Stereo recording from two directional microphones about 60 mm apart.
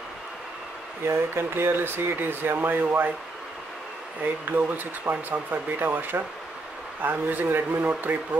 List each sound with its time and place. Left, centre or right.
1.0 s speech: right
4.5 s a man's voice: right